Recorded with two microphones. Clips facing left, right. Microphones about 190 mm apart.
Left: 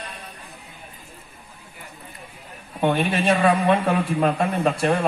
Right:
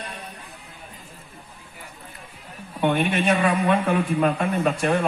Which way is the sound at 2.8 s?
35° left (ahead or behind).